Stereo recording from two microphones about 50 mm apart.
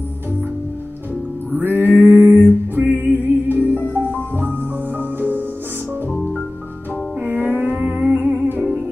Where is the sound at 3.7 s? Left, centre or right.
Left.